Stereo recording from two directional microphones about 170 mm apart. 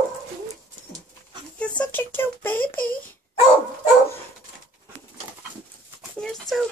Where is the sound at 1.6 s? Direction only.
10° left (ahead or behind).